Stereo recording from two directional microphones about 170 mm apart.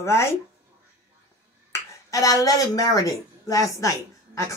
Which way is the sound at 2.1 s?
20° left (ahead or behind).